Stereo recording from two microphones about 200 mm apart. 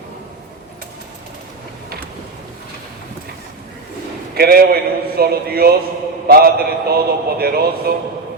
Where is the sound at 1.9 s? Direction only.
50° right (ahead or behind).